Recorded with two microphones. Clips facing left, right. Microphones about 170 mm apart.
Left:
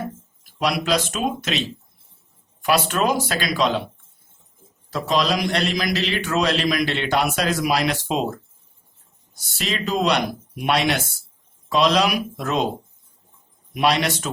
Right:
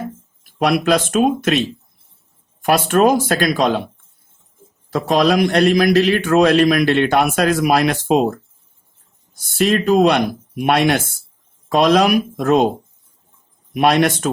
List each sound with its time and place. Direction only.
0.6 s a man's voice: 55° right (ahead or behind)
4.9 s a man's voice: 50° right (ahead or behind)
13.7 s a man's voice: 50° right (ahead or behind)